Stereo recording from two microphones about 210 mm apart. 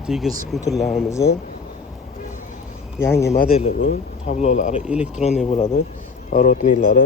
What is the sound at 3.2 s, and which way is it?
Speech, 45° left (ahead or behind).